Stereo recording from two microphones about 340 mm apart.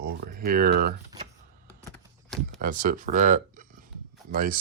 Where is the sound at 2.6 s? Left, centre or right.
Right.